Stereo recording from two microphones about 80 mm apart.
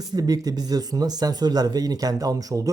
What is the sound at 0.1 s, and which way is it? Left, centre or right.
Speech, right.